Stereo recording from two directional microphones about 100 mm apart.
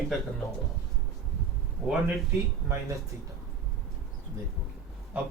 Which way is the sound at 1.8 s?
Centre (ahead or behind).